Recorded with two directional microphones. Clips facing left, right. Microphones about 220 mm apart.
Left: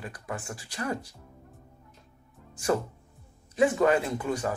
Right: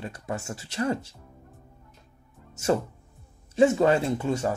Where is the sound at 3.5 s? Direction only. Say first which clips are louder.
Right 3 dB; 25° right (ahead or behind).